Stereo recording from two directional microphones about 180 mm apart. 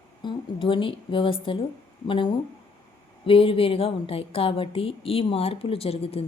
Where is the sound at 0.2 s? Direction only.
25° left (ahead or behind).